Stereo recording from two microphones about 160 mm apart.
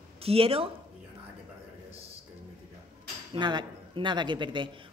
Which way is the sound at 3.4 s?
30° right (ahead or behind).